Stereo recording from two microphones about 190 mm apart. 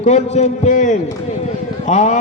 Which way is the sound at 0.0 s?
35° left (ahead or behind).